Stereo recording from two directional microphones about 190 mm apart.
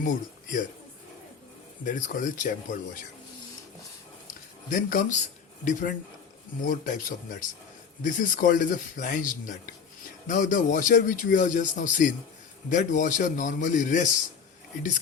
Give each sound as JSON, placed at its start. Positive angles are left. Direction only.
{"t": 0.0, "sound": "a man's voice", "side_deg": 45}
{"t": 1.8, "sound": "a man's voice", "side_deg": 45}
{"t": 4.7, "sound": "a man's voice", "side_deg": 45}
{"t": 6.6, "sound": "a man's voice", "side_deg": 45}